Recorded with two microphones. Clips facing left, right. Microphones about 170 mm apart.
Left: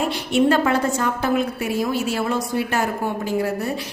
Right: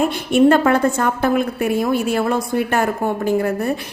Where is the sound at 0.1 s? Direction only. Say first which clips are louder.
Right 5 dB; 50° right (ahead or behind).